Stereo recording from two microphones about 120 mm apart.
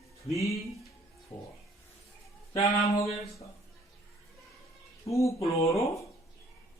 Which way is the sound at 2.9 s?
25° left (ahead or behind).